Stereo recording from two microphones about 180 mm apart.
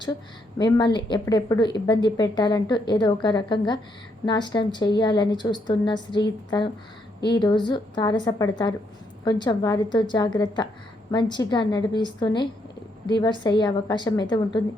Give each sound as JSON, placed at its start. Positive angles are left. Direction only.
{"t": 0.6, "sound": "a woman's voice", "side_deg": 25}